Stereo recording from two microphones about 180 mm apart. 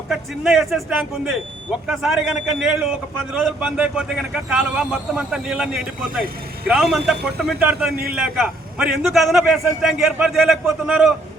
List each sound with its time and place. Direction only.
0.1 s a man's voice: centre (ahead or behind)